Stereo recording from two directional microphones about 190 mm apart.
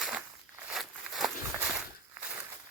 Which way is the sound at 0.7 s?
Centre (ahead or behind).